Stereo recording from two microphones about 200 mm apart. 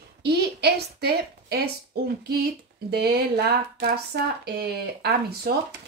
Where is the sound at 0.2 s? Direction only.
55° right (ahead or behind).